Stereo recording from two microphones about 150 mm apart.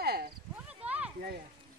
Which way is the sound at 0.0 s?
90° right.